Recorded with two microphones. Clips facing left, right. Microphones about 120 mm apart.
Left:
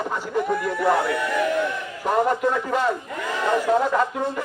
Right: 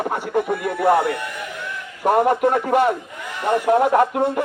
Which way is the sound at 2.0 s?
60° right (ahead or behind).